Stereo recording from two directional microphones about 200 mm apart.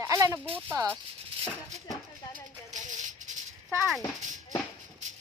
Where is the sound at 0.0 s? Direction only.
15° right (ahead or behind).